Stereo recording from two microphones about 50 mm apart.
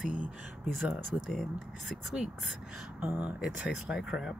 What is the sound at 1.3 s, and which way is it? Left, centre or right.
Speech, centre.